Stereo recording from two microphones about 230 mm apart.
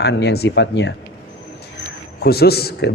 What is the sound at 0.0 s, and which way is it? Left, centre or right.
Speech, left.